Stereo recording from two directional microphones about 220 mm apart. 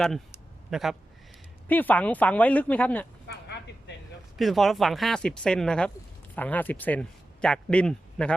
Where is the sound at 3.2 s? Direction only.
50° left (ahead or behind).